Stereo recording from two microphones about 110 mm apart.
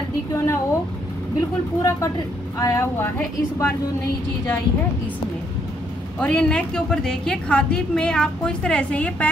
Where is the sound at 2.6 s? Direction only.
25° left (ahead or behind).